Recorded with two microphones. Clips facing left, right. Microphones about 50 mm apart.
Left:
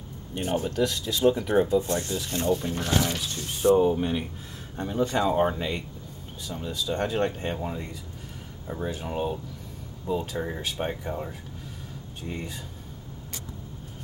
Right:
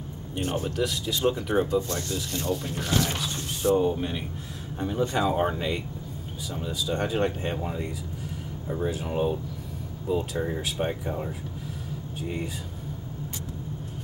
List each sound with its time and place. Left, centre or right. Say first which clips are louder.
0.4 s speech: left 2 dB; centre
1.8 s speech: left 2 dB; left
2.5 s speech: even; centre
3.1 s speech: even; centre
3.4 s speech: left 3 dB; centre